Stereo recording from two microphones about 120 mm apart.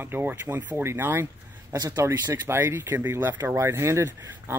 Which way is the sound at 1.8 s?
30° right (ahead or behind).